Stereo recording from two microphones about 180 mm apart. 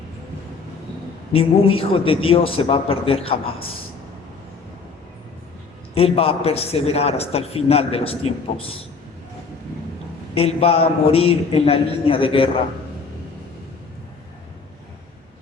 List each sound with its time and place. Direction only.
1.3 s a man's voice: 30° left (ahead or behind)
5.9 s a man's voice: 30° left (ahead or behind)
10.3 s a man's voice: 35° left (ahead or behind)